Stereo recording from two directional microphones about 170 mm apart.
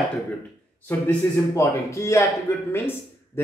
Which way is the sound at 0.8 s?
15° left (ahead or behind).